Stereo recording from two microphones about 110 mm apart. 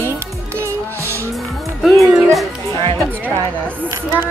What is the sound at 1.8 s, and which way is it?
Speech, centre (ahead or behind).